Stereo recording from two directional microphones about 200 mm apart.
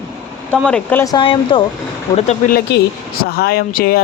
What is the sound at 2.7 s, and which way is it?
A woman's voice, 55° left (ahead or behind).